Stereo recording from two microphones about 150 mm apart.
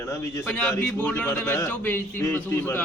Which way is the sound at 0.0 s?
20° left (ahead or behind).